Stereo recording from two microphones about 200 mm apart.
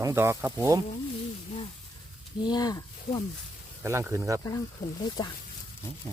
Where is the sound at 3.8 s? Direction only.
15° right (ahead or behind).